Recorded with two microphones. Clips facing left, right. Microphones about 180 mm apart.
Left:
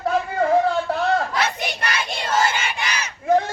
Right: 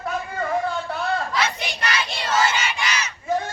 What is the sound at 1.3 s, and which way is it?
Crowd, 55° left (ahead or behind).